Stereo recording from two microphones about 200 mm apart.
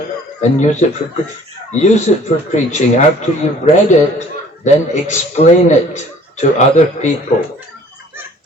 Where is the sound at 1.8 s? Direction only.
35° left (ahead or behind).